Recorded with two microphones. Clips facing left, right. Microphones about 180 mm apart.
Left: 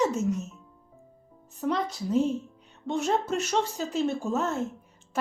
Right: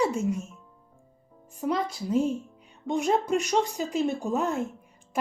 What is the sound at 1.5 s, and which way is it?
A woman's voice, 10° right (ahead or behind).